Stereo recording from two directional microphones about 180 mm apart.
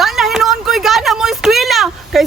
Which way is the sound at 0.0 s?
Centre (ahead or behind).